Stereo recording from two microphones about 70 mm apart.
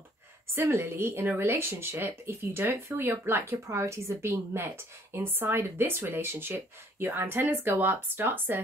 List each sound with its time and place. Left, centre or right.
0.6 s a woman's voice: right
3.6 s a woman's voice: right